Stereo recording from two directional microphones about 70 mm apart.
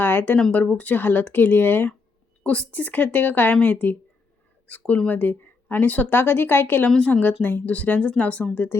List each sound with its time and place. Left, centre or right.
0.0 s a sound: left
0.5 s speech: left
2.4 s speech: centre